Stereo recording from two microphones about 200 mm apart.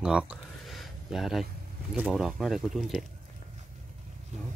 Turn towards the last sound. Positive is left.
turn(degrees=0)  # may be behind; listen again after turning